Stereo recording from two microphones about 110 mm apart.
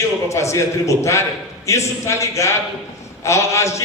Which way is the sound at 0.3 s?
25° left (ahead or behind).